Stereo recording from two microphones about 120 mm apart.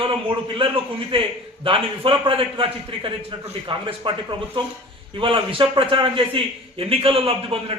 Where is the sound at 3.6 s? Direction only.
45° right (ahead or behind).